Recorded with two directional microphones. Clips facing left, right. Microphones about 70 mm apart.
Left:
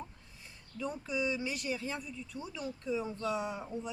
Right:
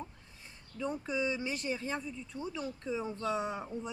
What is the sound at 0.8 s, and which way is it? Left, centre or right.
Speech, right.